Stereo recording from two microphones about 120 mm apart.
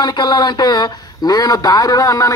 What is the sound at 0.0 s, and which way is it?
Speech, 35° left (ahead or behind).